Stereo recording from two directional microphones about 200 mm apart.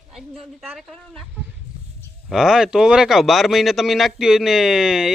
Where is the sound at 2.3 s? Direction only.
Centre (ahead or behind).